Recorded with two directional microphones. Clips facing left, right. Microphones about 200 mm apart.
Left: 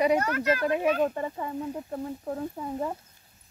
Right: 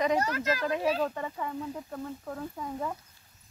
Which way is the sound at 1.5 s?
25° left (ahead or behind).